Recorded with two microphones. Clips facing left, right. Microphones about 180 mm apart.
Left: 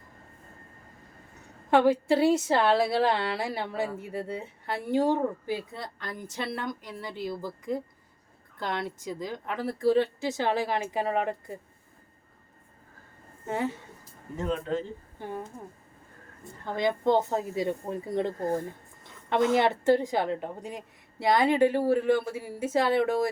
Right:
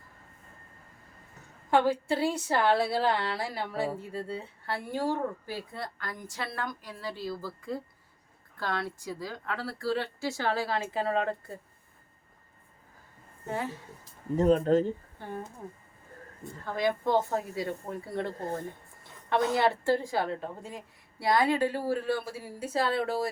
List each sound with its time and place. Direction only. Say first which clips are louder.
1.7 s speech: left 4 dB; 20° left (ahead or behind)
13.5 s speech: left 4 dB; 20° left (ahead or behind)
14.3 s speech: right 7 dB; 40° right (ahead or behind)
16.6 s speech: left 3 dB; 20° left (ahead or behind)
19.5 s speech: left 3 dB; 20° left (ahead or behind)